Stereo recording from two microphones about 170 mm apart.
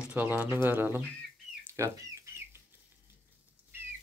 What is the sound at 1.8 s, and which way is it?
Chicken, 20° right (ahead or behind).